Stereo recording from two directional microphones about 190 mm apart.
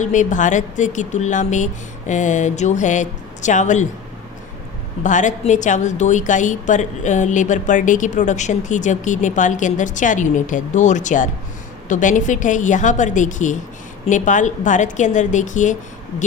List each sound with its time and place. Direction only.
0.0 s a woman's voice: 40° left (ahead or behind)
5.0 s a woman's voice: 40° left (ahead or behind)